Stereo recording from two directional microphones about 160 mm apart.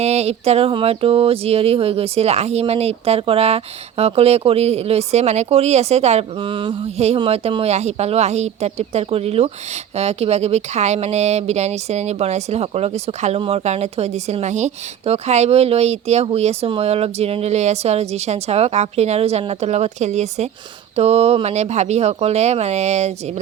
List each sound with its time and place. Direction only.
0.0 s speech: 40° right (ahead or behind)